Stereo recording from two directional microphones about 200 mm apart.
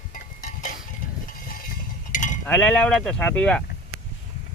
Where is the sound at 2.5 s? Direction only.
5° left (ahead or behind).